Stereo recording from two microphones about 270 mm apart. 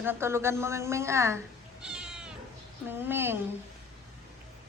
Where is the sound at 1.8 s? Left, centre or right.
Centre.